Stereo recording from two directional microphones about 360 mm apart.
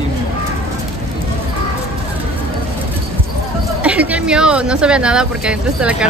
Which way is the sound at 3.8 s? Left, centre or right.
Centre.